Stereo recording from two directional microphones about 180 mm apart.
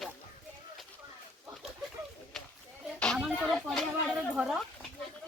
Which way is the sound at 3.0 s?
5° left (ahead or behind).